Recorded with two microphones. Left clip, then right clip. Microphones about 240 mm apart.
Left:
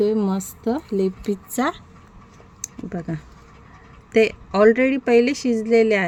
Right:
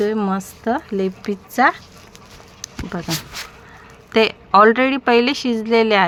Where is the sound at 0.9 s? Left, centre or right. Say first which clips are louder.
Even; centre.